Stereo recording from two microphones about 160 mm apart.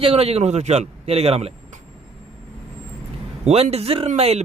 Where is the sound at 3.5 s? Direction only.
40° right (ahead or behind).